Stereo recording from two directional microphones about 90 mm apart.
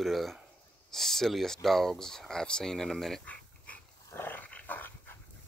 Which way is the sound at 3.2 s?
15° left (ahead or behind).